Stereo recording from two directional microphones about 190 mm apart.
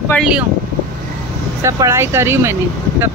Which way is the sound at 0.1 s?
Centre (ahead or behind).